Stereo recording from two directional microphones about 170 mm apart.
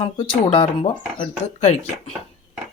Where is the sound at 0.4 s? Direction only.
30° left (ahead or behind).